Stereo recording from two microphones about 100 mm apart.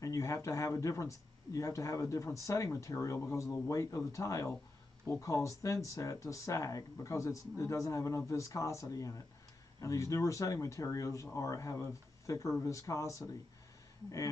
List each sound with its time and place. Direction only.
0.0 s speech: 30° left (ahead or behind)